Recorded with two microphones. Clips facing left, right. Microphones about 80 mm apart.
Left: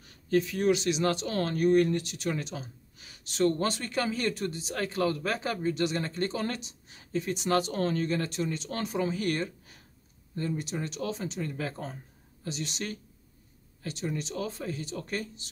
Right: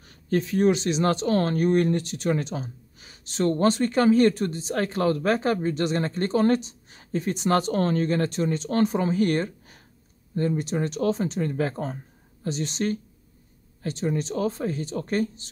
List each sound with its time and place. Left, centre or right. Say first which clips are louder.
0.0 s speech: right 1 dB; right